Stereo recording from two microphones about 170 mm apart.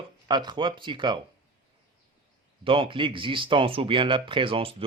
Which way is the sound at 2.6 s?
30° right (ahead or behind).